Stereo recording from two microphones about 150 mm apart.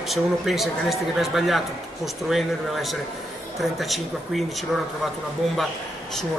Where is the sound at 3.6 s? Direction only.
Centre (ahead or behind).